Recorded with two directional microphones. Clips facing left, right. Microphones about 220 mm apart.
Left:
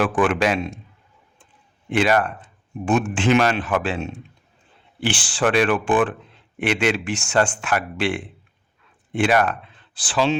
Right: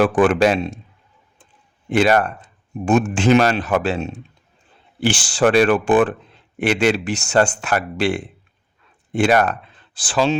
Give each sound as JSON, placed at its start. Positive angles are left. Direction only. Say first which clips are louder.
{"t": 0.0, "sound": "speech", "louder": "right 5 dB", "side_deg": -40}
{"t": 1.9, "sound": "speech", "louder": "right 3 dB", "side_deg": -40}